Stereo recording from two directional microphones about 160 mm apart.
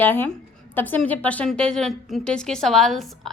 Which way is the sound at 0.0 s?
10° left (ahead or behind).